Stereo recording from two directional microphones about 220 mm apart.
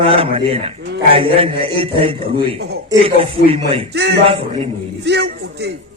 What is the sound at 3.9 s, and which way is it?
Speech, 50° right (ahead or behind).